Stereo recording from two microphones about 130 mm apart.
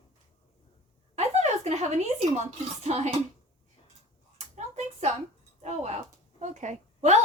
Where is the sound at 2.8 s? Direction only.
55° right (ahead or behind).